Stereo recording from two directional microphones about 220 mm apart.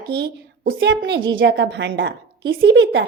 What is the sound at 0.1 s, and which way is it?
A woman's voice, 50° right (ahead or behind).